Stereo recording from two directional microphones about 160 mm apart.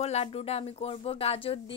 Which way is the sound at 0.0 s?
40° left (ahead or behind).